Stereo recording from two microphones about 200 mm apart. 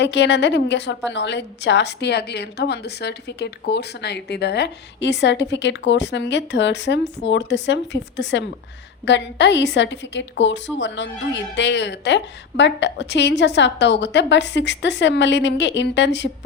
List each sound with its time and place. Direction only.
0.0 s a woman's voice: 60° left (ahead or behind)